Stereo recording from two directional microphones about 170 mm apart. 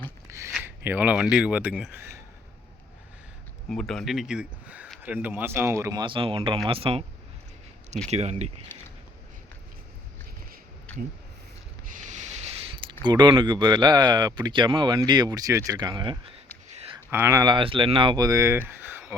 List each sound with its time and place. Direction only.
0.3 s a sound: 15° right (ahead or behind)
0.9 s speech: 10° right (ahead or behind)
3.7 s speech: centre (ahead or behind); by 7.0 s 35° right (ahead or behind)
8.1 s speech: 40° right (ahead or behind)
11.9 s a sound: 50° right (ahead or behind); by 13.0 s 30° right (ahead or behind)
13.1 s speech: 25° right (ahead or behind)
17.1 s speech: 15° right (ahead or behind)
17.4 s speech: 30° right (ahead or behind)
18.7 s a sound: 10° right (ahead or behind)